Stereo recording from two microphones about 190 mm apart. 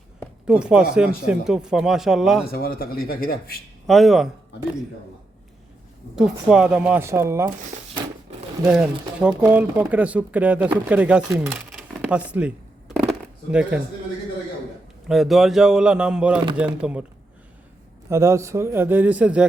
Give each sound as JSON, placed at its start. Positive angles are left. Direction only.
{"t": 0.4, "sound": "speech", "side_deg": -5}
{"t": 2.5, "sound": "speech", "side_deg": 50}
{"t": 3.8, "sound": "speech", "side_deg": 0}
{"t": 6.1, "sound": "speech", "side_deg": -5}
{"t": 8.6, "sound": "speech", "side_deg": -5}
{"t": 11.9, "sound": "a sound", "side_deg": -5}
{"t": 13.5, "sound": "speech", "side_deg": -5}
{"t": 15.0, "sound": "speech", "side_deg": 0}
{"t": 18.1, "sound": "speech", "side_deg": -15}